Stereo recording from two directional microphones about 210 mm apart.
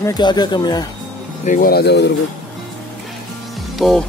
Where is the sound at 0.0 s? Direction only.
20° left (ahead or behind).